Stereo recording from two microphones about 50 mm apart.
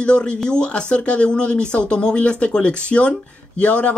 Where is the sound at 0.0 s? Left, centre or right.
Left.